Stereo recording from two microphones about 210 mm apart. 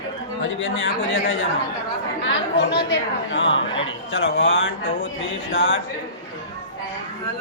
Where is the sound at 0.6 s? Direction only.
65° left (ahead or behind).